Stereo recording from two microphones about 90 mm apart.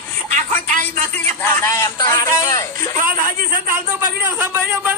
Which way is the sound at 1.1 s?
20° left (ahead or behind).